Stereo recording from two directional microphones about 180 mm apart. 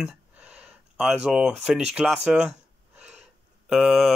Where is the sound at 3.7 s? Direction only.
Centre (ahead or behind).